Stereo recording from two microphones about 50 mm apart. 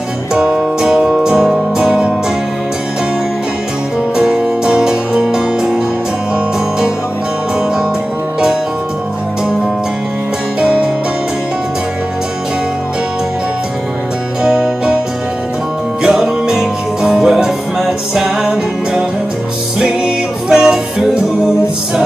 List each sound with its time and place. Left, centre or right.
0.3 s music: centre
4.2 s music: centre
10.6 s music: centre
14.4 s music: centre
16.0 s music: centre
20.4 s music: centre